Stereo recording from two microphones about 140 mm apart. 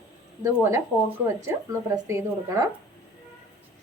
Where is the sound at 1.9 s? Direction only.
20° right (ahead or behind).